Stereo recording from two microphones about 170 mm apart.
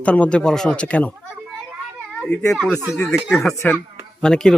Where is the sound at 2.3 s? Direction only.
5° left (ahead or behind).